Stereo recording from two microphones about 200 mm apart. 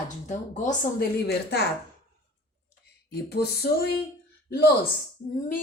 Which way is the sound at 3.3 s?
55° left (ahead or behind).